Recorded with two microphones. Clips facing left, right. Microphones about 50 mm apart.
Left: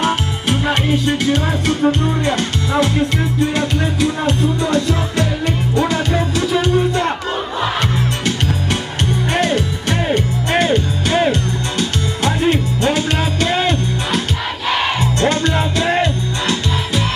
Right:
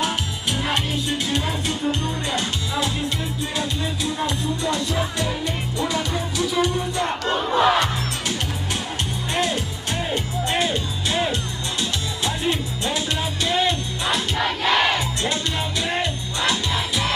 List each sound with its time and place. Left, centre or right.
0.0 s music: left
9.3 s music: left